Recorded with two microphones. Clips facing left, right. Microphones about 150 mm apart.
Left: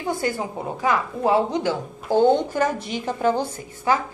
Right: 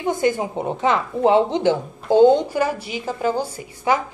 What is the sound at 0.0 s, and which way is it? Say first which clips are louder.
A woman's voice: right 5 dB; 20° right (ahead or behind).